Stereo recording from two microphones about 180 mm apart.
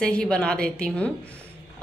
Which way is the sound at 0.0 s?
5° left (ahead or behind).